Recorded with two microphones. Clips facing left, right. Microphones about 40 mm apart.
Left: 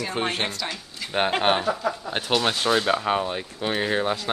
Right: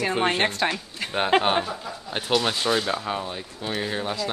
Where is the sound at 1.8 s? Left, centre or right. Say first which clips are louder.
Left 9 dB; left.